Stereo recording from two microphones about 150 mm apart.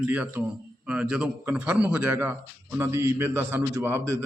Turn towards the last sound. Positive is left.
turn(degrees=-15)  # may be behind; listen again after turning